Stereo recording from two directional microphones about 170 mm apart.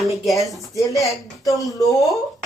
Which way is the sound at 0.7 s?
20° left (ahead or behind).